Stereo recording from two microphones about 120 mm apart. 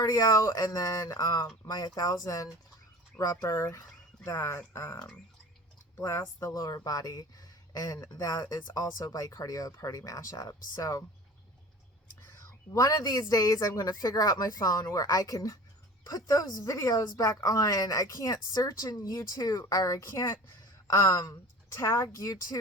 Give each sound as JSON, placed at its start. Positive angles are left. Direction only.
{"t": 0.1, "sound": "a woman's voice", "side_deg": 30}
{"t": 12.7, "sound": "a woman's voice", "side_deg": 30}